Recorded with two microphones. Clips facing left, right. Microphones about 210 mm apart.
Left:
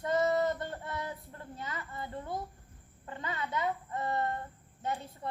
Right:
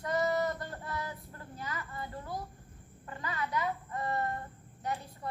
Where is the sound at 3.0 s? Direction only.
25° left (ahead or behind).